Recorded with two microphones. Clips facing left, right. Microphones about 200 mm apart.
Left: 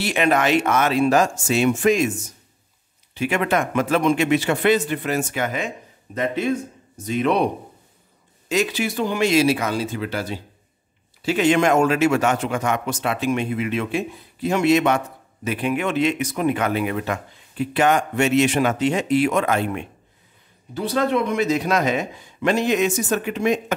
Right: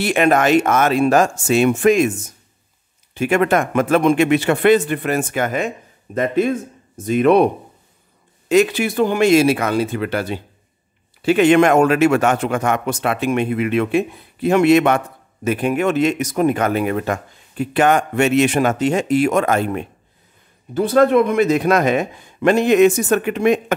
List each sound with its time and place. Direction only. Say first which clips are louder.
0.0 s speech: right 4 dB; 50° right (ahead or behind)
3.2 s speech: right 5 dB; 50° right (ahead or behind)
8.5 s a man's voice: right 7 dB; 55° right (ahead or behind); by 19.9 s 40° right (ahead or behind)
20.7 s a man's voice: right 8 dB; 50° right (ahead or behind)